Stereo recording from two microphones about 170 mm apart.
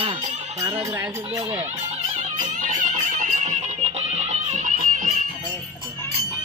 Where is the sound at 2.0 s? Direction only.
45° right (ahead or behind).